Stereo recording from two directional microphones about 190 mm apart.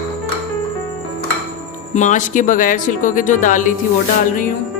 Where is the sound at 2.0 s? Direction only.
40° left (ahead or behind).